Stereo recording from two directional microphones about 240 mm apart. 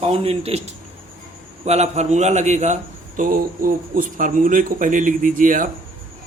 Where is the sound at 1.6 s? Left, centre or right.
Right.